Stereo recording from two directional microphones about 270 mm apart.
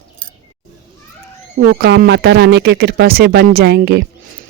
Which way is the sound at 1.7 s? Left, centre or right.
Right.